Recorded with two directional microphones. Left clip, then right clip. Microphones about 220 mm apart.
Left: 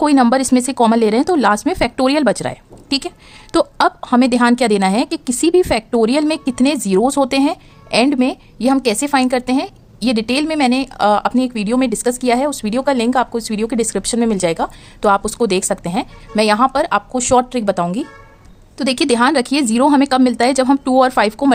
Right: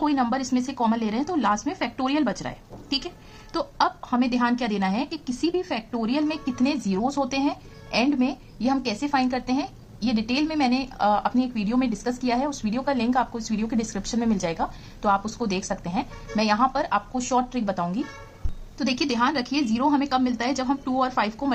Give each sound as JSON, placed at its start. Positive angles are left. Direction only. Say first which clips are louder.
{"t": 0.0, "sound": "a woman's voice", "louder": "left 11 dB", "side_deg": 45}